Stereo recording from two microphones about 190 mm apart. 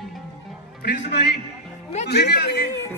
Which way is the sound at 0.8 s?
55° left (ahead or behind).